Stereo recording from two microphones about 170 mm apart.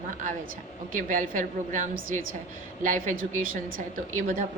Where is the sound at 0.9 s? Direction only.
50° right (ahead or behind).